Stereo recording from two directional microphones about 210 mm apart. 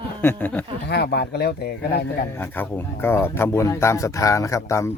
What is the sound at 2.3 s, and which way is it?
Speech, 10° left (ahead or behind).